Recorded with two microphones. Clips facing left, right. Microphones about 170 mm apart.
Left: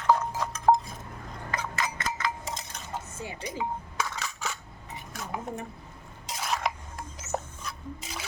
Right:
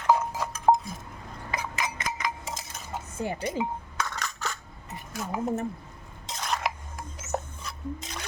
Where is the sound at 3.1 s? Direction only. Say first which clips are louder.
Right 7 dB; 55° right (ahead or behind).